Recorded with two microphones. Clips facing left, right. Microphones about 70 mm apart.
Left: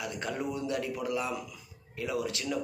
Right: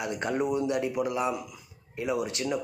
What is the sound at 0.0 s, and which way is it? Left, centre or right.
A man's voice, right.